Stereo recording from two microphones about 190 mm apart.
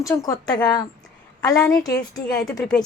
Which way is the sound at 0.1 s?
20° left (ahead or behind).